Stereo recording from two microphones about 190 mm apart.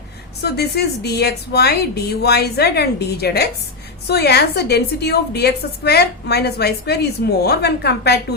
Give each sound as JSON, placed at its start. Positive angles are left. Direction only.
{"t": 0.4, "sound": "a woman's voice", "side_deg": 60}